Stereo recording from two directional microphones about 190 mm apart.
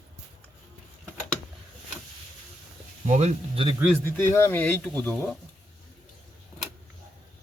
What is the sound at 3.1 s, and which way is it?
Speech, 35° right (ahead or behind).